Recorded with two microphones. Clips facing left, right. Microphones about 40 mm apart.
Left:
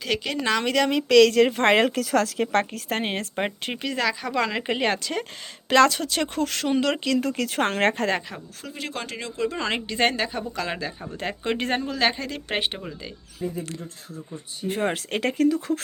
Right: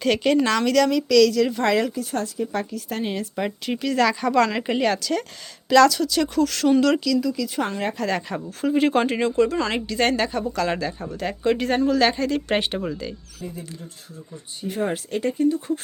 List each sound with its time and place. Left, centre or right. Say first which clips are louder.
0.0 s speech: right 7 dB; centre
0.6 s a woman's voice: right 3 dB; left
2.0 s a woman's voice: left 3 dB; left
3.9 s speech: right 6 dB; centre
4.8 s a woman's voice: right 3 dB; left
7.0 s speech: right 2 dB; left
8.3 s speech: right 9 dB; centre
8.6 s speech: right 14 dB; centre
9.5 s speech: right 3 dB; centre
10.1 s speech: right 4 dB; centre
11.2 s a woman's voice: right 4 dB; left
11.8 s speech: right 5 dB; centre
14.7 s speech: even; left